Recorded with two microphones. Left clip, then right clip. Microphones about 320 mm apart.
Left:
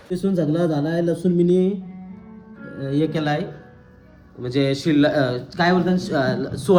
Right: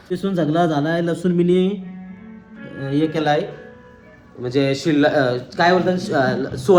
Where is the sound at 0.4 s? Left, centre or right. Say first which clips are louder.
Right 6 dB; centre.